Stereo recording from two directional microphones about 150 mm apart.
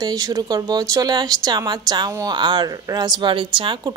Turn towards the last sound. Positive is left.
turn(degrees=-35)  # may be behind; listen again after turning